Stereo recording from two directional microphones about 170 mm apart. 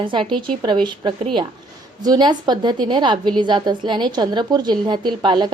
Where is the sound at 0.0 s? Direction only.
30° right (ahead or behind).